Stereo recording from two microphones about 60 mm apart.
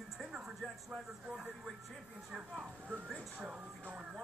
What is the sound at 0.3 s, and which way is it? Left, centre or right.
Speech, centre.